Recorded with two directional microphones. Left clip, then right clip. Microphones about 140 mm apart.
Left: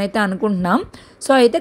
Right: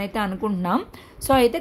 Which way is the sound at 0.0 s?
35° left (ahead or behind).